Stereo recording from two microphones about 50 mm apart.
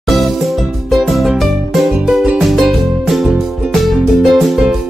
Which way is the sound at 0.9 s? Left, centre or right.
Centre.